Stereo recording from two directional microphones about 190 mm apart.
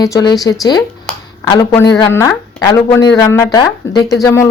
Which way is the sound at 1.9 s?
15° left (ahead or behind).